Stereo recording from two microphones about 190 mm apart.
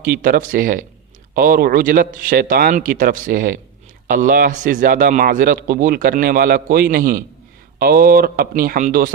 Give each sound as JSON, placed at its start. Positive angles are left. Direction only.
{"t": 0.0, "sound": "a man's voice", "side_deg": -50}